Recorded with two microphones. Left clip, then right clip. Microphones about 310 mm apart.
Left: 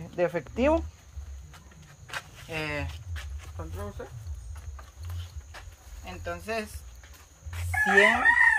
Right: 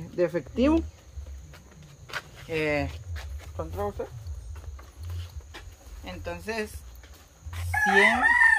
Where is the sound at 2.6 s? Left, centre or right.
Right.